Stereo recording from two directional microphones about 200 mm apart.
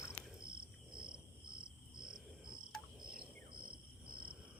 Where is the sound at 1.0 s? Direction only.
25° right (ahead or behind).